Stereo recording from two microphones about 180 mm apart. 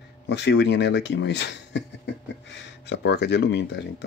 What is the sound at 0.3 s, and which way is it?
Speech, 75° left (ahead or behind).